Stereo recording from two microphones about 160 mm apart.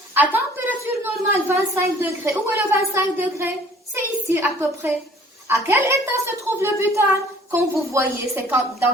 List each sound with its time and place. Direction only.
0.1 s a woman's voice: 10° right (ahead or behind)